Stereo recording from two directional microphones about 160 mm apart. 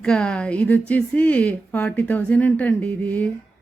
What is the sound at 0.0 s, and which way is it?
A woman's voice, 5° left (ahead or behind).